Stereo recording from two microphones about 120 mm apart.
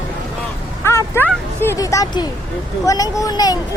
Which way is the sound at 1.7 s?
30° left (ahead or behind).